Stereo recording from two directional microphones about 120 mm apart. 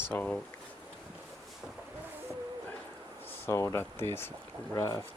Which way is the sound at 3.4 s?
25° left (ahead or behind).